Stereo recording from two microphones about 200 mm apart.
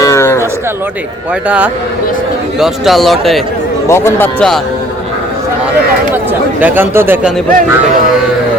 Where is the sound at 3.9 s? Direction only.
10° left (ahead or behind).